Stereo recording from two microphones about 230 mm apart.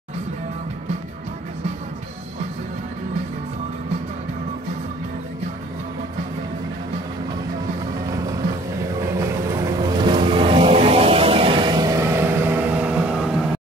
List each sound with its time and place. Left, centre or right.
9.2 s vehicle: centre